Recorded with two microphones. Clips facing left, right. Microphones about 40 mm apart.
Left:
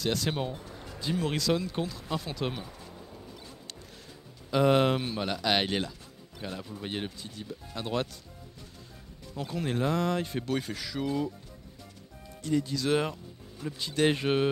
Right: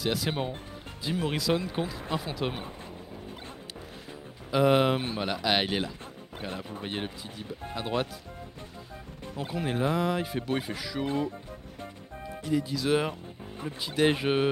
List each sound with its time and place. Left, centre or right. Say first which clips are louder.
0.0 s speech: right 1 dB; centre
4.5 s speech: right 1 dB; centre
6.4 s speech: right 1 dB; right
6.8 s speech: left 1 dB; centre
9.5 s speech: right 1 dB; centre
11.1 s speech: right 1 dB; right
12.3 s speech: even; centre